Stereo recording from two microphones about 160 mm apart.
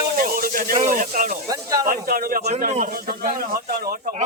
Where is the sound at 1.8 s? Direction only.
65° right (ahead or behind).